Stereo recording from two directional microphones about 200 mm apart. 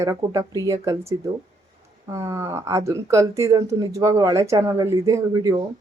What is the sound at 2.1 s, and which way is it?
Speech, 15° right (ahead or behind).